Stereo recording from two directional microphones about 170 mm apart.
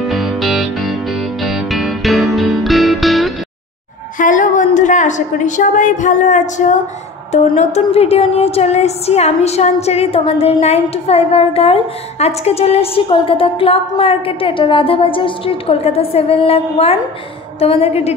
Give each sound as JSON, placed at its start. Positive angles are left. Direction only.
{"t": 0.1, "sound": "music", "side_deg": 0}
{"t": 4.2, "sound": "a woman's voice", "side_deg": 50}